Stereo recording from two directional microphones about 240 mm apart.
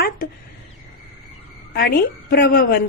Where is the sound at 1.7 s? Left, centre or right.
Left.